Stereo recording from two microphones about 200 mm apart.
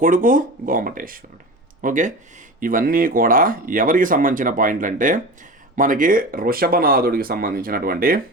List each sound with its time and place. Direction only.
0.0 s speech: 45° right (ahead or behind)